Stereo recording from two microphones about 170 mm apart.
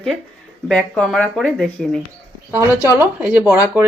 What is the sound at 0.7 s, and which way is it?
Speech, 5° left (ahead or behind).